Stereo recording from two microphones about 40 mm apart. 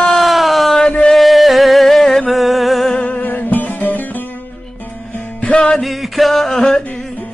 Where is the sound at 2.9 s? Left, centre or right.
Left.